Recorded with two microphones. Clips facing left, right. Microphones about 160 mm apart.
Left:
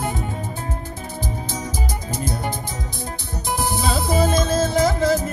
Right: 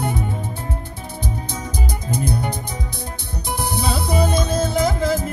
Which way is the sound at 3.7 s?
45° left (ahead or behind).